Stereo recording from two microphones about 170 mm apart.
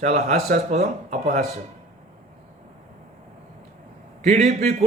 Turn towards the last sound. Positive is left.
turn(degrees=-40)  # may be behind; listen again after turning